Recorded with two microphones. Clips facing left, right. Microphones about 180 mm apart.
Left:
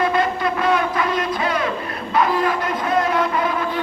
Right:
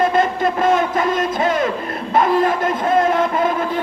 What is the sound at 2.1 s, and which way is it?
Speech, 45° right (ahead or behind).